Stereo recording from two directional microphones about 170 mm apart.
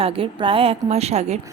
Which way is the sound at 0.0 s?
35° right (ahead or behind).